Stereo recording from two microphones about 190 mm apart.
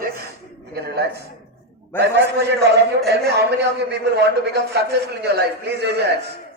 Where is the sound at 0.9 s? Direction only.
60° right (ahead or behind).